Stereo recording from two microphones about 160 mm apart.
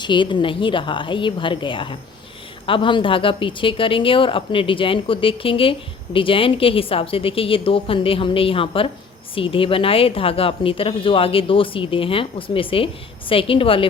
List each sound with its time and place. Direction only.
0.0 s a woman's voice: 30° left (ahead or behind)